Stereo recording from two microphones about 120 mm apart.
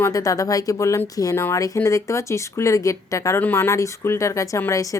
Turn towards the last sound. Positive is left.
turn(degrees=25)  # may be behind; listen again after turning